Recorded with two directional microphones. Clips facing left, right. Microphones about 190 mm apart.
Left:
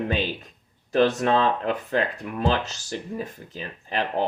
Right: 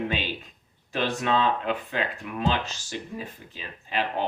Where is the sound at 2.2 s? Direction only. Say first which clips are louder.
Left 3 dB; 40° left (ahead or behind).